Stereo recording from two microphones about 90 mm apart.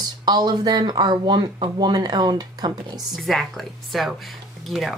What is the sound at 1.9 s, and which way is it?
Speech, 50° right (ahead or behind).